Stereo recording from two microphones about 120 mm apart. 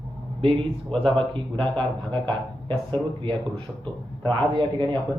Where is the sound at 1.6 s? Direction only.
40° right (ahead or behind).